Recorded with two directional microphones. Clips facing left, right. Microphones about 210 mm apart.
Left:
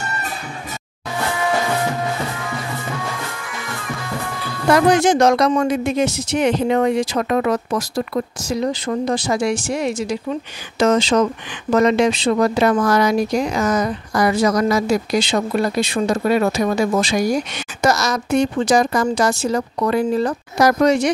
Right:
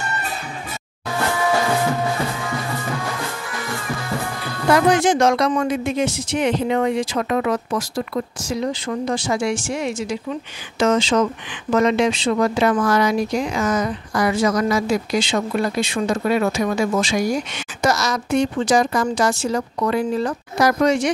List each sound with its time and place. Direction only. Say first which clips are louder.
5.0 s speech: left 2 dB; 40° left (ahead or behind)